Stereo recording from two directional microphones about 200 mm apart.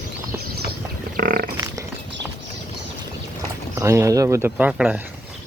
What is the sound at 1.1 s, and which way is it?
Pig, 45° right (ahead or behind).